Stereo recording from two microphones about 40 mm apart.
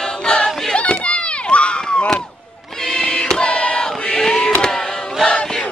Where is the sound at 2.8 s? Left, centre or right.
Centre.